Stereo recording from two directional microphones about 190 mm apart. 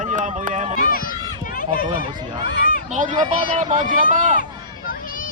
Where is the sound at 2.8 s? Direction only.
40° right (ahead or behind).